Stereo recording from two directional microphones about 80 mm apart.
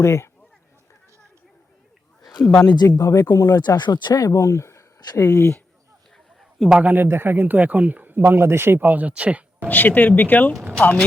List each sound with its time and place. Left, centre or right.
0.0 s speech: left
2.8 s speech: left
4.1 s speech: left
6.7 s speech: right
9.6 s speech: left